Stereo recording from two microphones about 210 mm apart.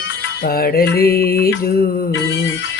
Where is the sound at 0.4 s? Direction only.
45° left (ahead or behind).